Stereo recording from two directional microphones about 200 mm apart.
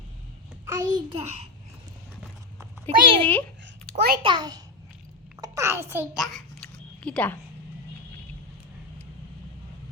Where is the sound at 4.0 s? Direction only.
50° right (ahead or behind).